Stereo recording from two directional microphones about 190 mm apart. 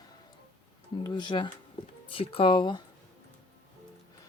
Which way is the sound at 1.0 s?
25° left (ahead or behind).